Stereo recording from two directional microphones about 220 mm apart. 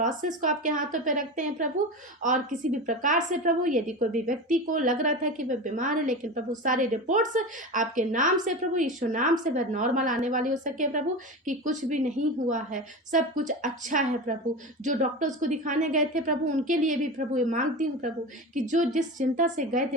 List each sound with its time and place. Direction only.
0.0 s a woman's voice: 35° right (ahead or behind)